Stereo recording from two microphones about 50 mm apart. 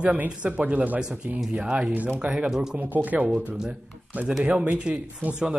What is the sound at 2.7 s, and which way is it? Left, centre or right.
Speech, right.